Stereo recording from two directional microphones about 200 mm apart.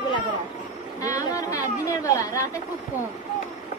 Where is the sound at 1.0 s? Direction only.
15° left (ahead or behind).